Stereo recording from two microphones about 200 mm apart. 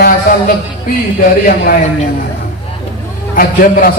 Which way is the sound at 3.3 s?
45° left (ahead or behind).